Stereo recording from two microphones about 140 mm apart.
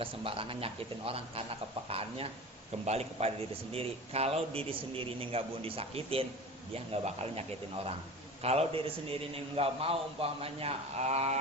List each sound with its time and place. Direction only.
0.0 s a man's voice: 40° right (ahead or behind)